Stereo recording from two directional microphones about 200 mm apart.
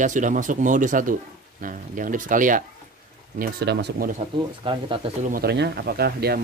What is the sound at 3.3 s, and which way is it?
Speech, 55° right (ahead or behind).